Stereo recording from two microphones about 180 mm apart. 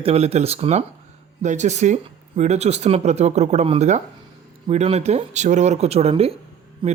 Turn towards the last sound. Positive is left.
turn(degrees=-25)  # may be behind; listen again after turning